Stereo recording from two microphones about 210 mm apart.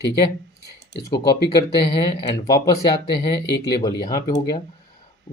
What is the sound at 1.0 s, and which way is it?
Speech, 20° left (ahead or behind).